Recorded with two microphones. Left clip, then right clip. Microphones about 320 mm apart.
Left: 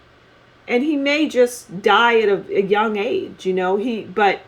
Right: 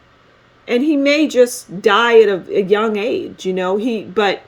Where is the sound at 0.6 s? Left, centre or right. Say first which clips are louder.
Right 4 dB; right.